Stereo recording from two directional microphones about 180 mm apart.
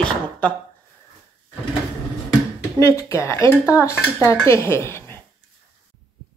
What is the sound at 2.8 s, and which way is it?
A woman's voice, 15° left (ahead or behind).